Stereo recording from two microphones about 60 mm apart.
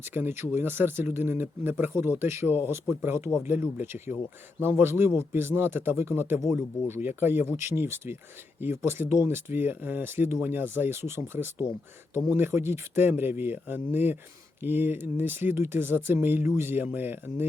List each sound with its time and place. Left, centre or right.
0.0 s speech: right
2.5 s speech: right